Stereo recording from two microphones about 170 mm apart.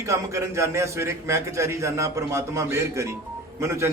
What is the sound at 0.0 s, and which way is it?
A man's voice, 15° right (ahead or behind).